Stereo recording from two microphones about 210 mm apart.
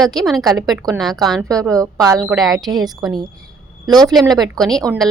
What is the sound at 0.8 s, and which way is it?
A woman's voice, 15° right (ahead or behind).